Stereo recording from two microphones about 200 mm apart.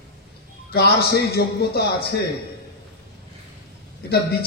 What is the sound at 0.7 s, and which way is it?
Speech, 50° left (ahead or behind).